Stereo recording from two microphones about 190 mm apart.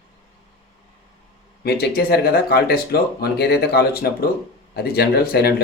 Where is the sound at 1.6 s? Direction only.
55° left (ahead or behind).